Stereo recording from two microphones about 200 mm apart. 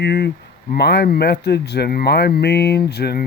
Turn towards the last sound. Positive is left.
turn(degrees=55)  # may be behind; listen again after turning